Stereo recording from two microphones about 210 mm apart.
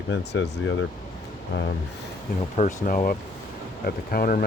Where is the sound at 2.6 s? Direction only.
40° left (ahead or behind).